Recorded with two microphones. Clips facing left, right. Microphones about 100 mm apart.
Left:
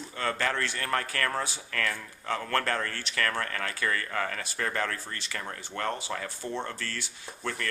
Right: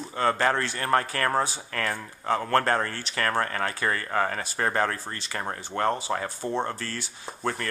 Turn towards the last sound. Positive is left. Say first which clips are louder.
# right 5 dB
turn(degrees=-35)  # may be behind; listen again after turning